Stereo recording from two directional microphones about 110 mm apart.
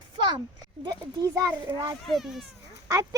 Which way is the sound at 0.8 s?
30° right (ahead or behind).